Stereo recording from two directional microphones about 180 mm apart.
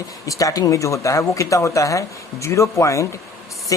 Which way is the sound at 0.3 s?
20° left (ahead or behind).